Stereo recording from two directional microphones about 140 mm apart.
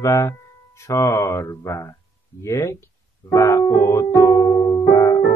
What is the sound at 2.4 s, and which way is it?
Speech, 20° left (ahead or behind).